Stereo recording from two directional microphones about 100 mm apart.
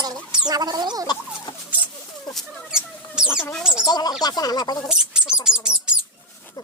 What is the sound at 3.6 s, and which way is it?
Speech, 5° right (ahead or behind).